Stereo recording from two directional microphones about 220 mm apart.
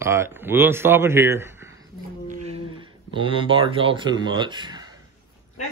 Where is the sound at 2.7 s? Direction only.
20° right (ahead or behind).